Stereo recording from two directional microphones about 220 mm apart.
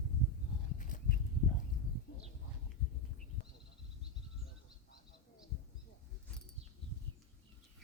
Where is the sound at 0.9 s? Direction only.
35° left (ahead or behind).